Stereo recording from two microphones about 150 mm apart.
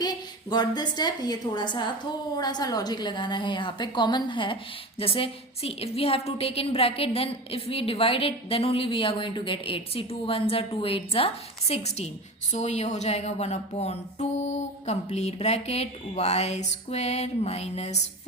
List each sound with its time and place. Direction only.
0.0 s a woman's voice: 25° left (ahead or behind); by 18.0 s 45° left (ahead or behind)